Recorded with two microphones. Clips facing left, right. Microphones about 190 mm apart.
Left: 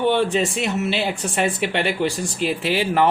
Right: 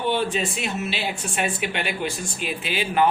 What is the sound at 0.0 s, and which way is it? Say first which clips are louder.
Speech: left 5 dB; 70° left (ahead or behind).